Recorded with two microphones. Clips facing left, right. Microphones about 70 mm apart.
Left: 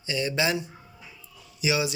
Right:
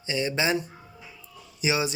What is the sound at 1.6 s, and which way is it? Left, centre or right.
Speech, right.